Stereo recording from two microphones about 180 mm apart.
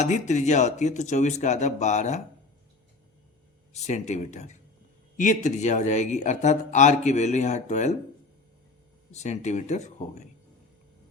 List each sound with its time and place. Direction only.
0.0 s a man's voice: 40° left (ahead or behind)
3.7 s a man's voice: 40° left (ahead or behind)
9.1 s a man's voice: 40° left (ahead or behind)